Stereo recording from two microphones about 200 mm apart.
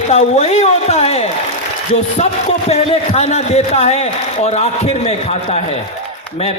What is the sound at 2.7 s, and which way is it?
A man's voice, 30° left (ahead or behind).